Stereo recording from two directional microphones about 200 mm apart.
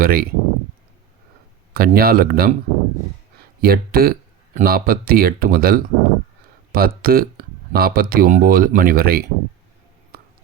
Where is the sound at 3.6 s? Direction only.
50° right (ahead or behind).